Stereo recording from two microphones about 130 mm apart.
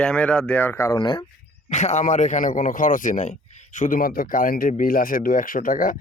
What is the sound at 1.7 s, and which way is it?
Speech, 60° left (ahead or behind).